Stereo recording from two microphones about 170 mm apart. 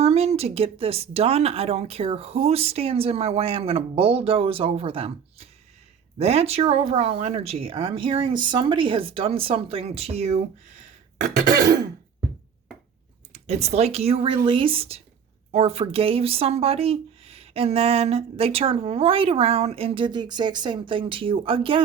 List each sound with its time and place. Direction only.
0.0 s speech: 40° right (ahead or behind)
13.3 s speech: 40° right (ahead or behind)